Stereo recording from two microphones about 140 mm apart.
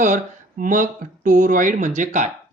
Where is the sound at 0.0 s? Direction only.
65° right (ahead or behind).